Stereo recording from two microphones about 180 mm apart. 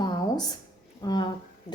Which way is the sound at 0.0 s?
20° left (ahead or behind).